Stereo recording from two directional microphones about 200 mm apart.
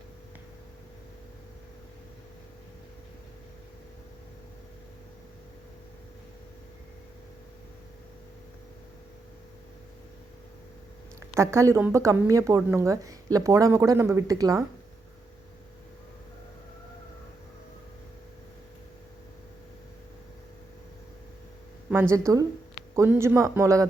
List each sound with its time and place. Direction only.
11.3 s a woman's voice: 15° right (ahead or behind)
22.1 s a woman's voice: 15° right (ahead or behind)